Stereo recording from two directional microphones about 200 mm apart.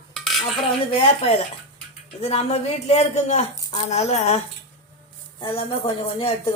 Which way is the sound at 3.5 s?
15° left (ahead or behind).